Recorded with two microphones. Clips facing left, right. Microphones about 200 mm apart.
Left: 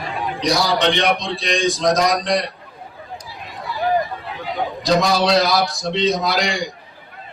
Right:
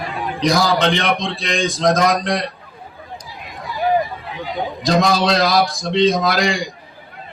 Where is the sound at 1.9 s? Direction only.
55° right (ahead or behind).